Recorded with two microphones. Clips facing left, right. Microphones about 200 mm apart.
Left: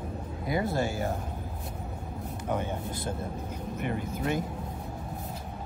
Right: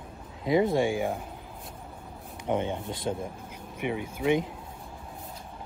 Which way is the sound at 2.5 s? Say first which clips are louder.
Right 3 dB; 20° right (ahead or behind).